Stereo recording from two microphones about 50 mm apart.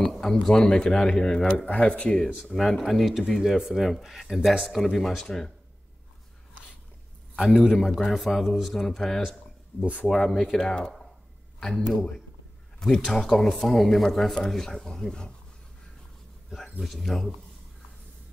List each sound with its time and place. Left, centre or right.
0.0 s speech: centre; by 2.1 s left
2.4 s speech: centre
7.3 s speech: centre
8.7 s speech: centre
16.8 s speech: centre